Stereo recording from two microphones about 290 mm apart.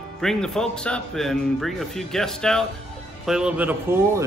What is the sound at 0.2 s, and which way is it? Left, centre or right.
A man's voice, centre.